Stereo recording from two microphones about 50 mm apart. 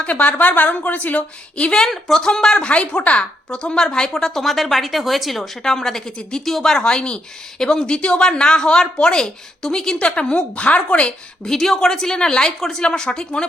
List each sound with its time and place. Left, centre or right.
0.0 s a woman's voice: left
1.7 s speech: centre
11.4 s speech: centre
12.5 s speech: centre
12.8 s speech: centre